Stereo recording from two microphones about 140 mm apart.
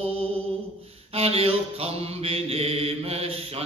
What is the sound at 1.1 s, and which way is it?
Mantra, 45° right (ahead or behind).